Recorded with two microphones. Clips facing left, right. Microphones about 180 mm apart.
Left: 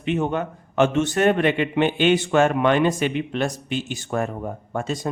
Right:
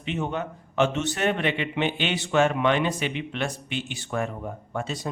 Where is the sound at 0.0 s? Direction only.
55° left (ahead or behind).